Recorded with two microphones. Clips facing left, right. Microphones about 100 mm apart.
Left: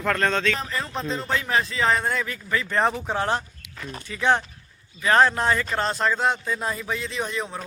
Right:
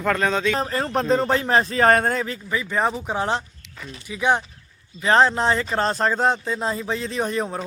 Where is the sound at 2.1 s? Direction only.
30° right (ahead or behind).